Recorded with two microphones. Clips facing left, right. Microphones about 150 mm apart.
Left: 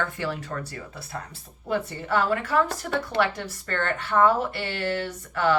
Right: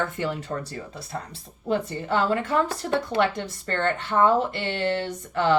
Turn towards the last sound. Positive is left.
turn(degrees=-25)  # may be behind; listen again after turning